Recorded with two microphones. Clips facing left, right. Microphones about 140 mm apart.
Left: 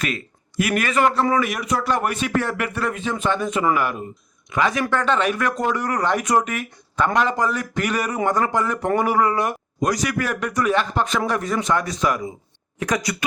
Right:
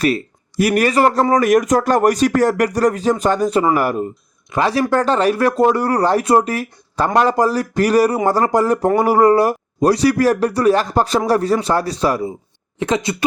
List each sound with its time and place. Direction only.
0.0 s speech: 35° right (ahead or behind)